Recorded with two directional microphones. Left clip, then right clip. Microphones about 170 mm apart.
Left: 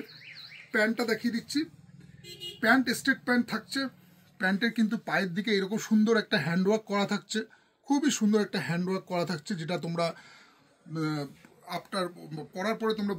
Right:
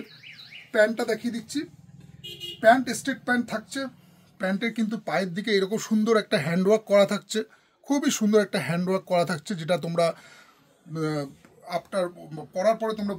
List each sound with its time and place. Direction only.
0.7 s speech: 35° right (ahead or behind)
2.6 s speech: 30° right (ahead or behind); by 10.2 s 80° right
10.9 s speech: 50° right (ahead or behind)
11.6 s speech: 35° right (ahead or behind)